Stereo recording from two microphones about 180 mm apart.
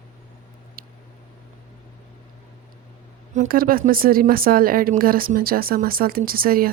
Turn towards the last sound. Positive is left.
turn(degrees=-55)  # may be behind; listen again after turning